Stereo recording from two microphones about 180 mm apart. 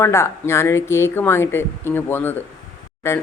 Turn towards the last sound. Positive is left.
turn(degrees=15)  # may be behind; listen again after turning